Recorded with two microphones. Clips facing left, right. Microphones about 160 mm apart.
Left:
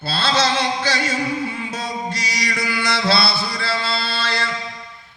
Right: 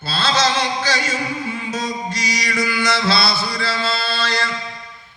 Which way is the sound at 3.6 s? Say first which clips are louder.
Right 2 dB; 60° left (ahead or behind).